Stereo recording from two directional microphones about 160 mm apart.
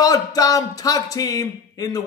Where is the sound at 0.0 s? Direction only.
20° left (ahead or behind).